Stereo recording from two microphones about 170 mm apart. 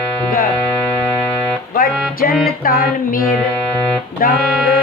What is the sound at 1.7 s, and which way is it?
Music, 60° left (ahead or behind).